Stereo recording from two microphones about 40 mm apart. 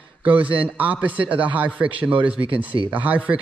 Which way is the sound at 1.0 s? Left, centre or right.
Right.